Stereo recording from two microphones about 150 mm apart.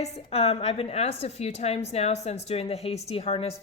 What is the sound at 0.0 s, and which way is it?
A woman's voice, 40° left (ahead or behind).